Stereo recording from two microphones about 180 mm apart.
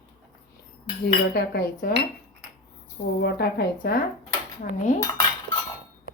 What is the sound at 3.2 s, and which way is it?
Speech, 65° left (ahead or behind).